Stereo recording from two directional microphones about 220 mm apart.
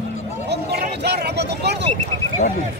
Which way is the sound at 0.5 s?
50° right (ahead or behind).